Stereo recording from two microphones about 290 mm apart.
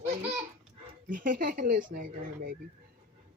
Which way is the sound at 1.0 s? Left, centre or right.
Right.